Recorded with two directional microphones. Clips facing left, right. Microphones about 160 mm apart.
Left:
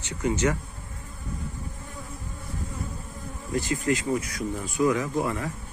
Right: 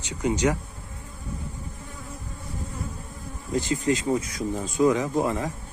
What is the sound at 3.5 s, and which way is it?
Speech, 20° right (ahead or behind).